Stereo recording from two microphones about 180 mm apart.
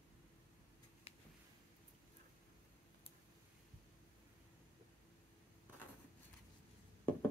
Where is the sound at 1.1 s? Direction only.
35° left (ahead or behind).